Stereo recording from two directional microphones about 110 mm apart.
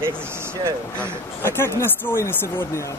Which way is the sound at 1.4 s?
20° left (ahead or behind).